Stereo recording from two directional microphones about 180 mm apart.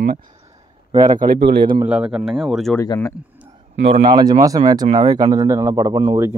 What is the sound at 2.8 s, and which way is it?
Speech, 15° left (ahead or behind).